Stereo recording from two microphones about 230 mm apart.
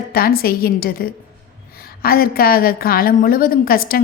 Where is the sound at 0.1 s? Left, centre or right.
Left.